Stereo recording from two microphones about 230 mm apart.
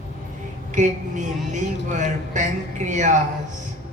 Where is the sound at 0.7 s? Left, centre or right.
Right.